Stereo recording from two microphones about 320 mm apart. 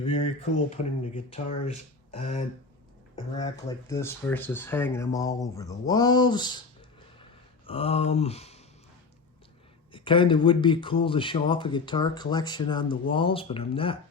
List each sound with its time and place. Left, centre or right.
0.0 s speech: centre
3.7 s speech: centre
7.7 s a sound: centre
9.9 s speech: centre